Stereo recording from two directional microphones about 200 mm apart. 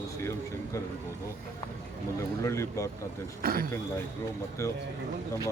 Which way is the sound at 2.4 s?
15° left (ahead or behind).